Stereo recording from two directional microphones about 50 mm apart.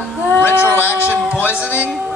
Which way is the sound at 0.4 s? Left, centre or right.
Left.